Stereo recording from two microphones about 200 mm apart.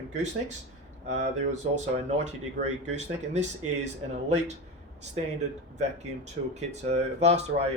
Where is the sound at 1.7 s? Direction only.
35° right (ahead or behind).